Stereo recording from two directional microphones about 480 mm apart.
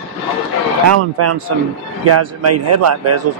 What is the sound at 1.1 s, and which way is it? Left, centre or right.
A man's voice, right.